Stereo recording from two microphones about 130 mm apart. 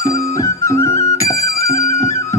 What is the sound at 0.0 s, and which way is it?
Music, 25° left (ahead or behind).